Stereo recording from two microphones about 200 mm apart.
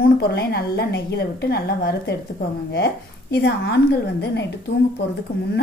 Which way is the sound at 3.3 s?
55° left (ahead or behind).